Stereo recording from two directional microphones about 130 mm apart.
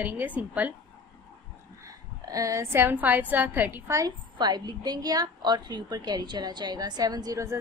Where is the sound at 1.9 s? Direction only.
25° right (ahead or behind).